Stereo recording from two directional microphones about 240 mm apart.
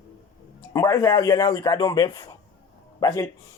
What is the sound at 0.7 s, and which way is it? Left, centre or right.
A man's voice, centre.